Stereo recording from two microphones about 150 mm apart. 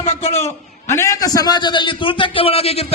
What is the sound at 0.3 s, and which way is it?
A man's voice, 20° left (ahead or behind).